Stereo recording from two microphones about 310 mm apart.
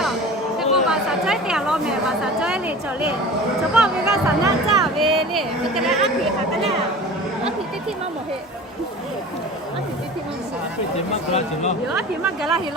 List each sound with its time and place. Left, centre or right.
0.6 s chatter: centre
3.8 s speech: centre
11.3 s speech: left
11.9 s speech: centre